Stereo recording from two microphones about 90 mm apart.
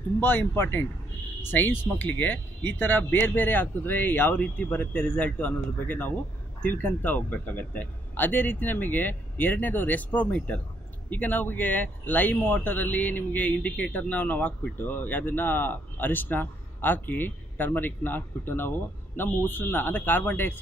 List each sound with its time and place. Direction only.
0.2 s speech: 20° left (ahead or behind)